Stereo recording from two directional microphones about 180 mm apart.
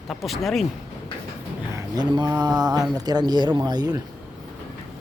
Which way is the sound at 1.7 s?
20° right (ahead or behind).